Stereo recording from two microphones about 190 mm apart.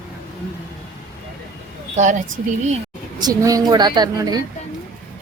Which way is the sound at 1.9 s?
40° right (ahead or behind).